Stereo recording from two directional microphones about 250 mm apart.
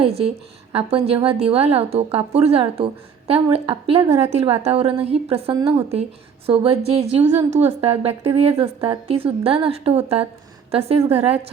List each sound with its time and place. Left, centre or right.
0.0 s a woman's voice: right